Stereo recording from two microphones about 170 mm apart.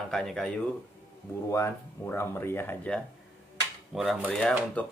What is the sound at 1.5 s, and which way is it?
Speech, 15° left (ahead or behind).